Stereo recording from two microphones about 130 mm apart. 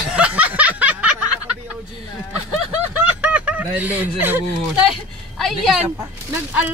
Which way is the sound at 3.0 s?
10° right (ahead or behind).